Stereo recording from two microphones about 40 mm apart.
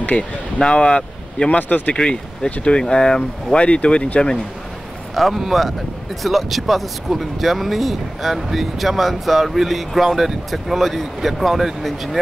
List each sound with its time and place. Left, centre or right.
0.1 s speech: left
1.6 s speech: left
2.0 s speech: left
3.5 s speech: left
5.1 s speech: centre